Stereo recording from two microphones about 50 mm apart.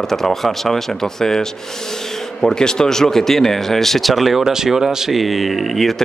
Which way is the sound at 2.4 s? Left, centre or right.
Centre.